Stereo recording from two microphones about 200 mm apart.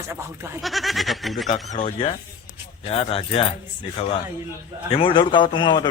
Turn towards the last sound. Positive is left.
turn(degrees=25)  # may be behind; listen again after turning